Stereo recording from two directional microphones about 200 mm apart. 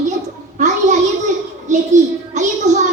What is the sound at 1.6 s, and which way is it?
Music, 35° right (ahead or behind).